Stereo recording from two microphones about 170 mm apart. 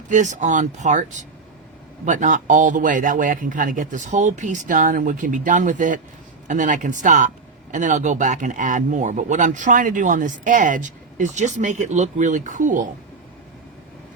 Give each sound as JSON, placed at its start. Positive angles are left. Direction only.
{"t": 0.1, "sound": "speech", "side_deg": -45}